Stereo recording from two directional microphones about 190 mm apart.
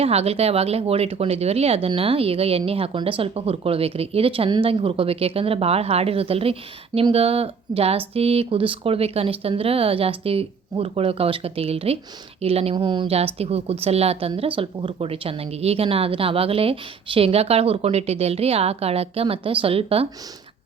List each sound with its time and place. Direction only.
0.0 s speech: 30° right (ahead or behind)